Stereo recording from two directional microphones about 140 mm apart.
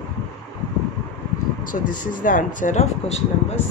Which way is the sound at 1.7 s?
75° left (ahead or behind).